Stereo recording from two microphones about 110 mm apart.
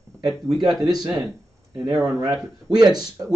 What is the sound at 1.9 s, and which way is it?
Speech, 5° right (ahead or behind).